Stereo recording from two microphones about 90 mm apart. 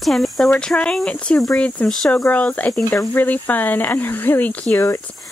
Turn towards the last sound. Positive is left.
turn(degrees=20)  # may be behind; listen again after turning